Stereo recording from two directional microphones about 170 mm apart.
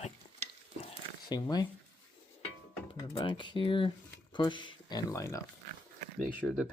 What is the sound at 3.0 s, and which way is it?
Speech, 25° left (ahead or behind).